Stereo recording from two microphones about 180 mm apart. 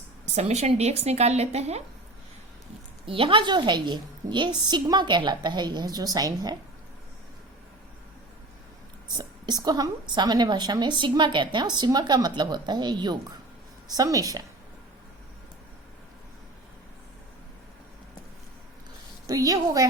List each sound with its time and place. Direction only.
0.3 s a woman's voice: 35° right (ahead or behind)
3.1 s a woman's voice: 30° right (ahead or behind)
9.1 s a woman's voice: 20° right (ahead or behind)
19.3 s a woman's voice: 20° right (ahead or behind)